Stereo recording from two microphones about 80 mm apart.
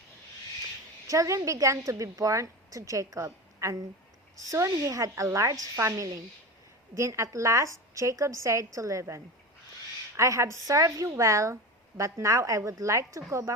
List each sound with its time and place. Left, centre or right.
1.0 s a woman's voice: right